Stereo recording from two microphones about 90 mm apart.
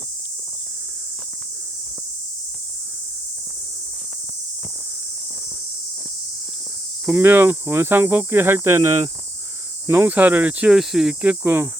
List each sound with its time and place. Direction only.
7.1 s cricket: 25° right (ahead or behind)
10.7 s speech: 5° right (ahead or behind); by 11.7 s 25° right (ahead or behind)